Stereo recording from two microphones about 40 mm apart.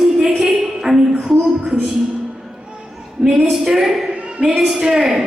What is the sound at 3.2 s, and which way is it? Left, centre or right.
Speech, centre.